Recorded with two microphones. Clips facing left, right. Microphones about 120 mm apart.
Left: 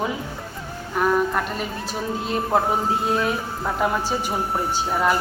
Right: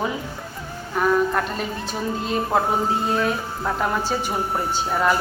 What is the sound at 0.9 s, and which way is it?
A woman's voice, 5° left (ahead or behind).